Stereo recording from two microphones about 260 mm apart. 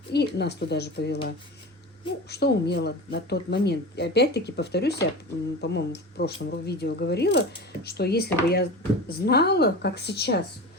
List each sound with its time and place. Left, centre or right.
0.1 s speech: left
2.3 s speech: left